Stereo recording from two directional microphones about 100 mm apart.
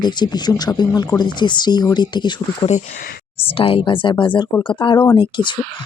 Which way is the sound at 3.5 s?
65° left (ahead or behind).